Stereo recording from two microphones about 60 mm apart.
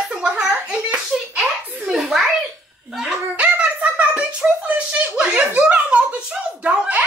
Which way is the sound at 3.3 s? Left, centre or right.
Right.